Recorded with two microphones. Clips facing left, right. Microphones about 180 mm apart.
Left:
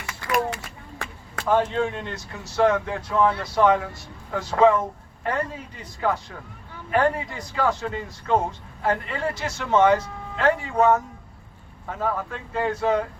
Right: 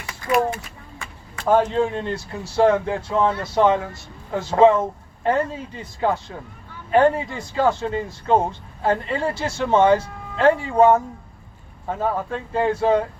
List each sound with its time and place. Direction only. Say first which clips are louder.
1.5 s speech: right 4 dB; 35° right (ahead or behind)